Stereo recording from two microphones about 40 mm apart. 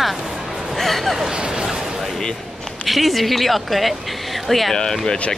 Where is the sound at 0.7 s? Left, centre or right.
Centre.